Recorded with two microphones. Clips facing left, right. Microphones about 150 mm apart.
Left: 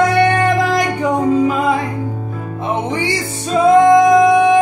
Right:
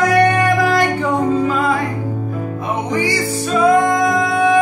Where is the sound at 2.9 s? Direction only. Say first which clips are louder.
Right 2 dB; 25° left (ahead or behind).